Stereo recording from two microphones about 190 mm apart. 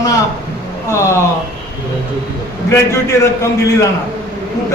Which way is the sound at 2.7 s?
15° left (ahead or behind).